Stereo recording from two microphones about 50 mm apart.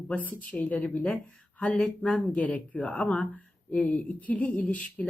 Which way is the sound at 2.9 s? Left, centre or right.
Centre.